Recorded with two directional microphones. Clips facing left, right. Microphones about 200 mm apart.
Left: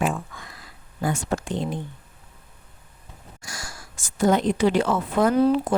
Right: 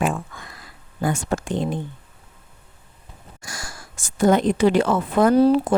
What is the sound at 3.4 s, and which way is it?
Speech, 50° right (ahead or behind).